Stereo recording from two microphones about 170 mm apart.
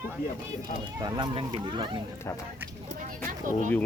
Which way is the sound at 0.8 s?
25° right (ahead or behind).